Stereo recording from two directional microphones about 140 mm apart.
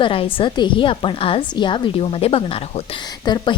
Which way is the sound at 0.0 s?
40° left (ahead or behind).